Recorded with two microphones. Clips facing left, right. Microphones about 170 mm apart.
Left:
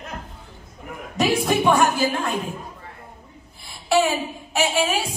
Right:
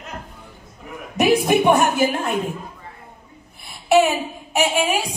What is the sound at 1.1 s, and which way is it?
A woman's voice, 20° right (ahead or behind).